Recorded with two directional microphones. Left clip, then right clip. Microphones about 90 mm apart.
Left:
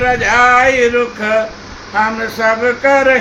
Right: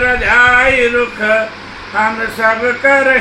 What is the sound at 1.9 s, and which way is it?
Speech, 25° left (ahead or behind).